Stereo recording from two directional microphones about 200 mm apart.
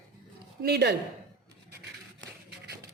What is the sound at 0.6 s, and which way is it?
Speech, 55° right (ahead or behind).